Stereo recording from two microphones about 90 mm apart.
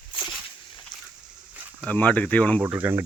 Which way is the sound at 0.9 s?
55° left (ahead or behind).